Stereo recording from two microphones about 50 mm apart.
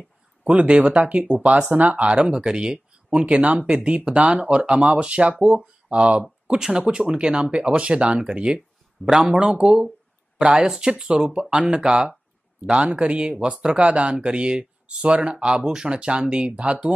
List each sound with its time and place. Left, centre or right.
0.4 s speech: right
12.8 s speech: right
15.3 s speech: centre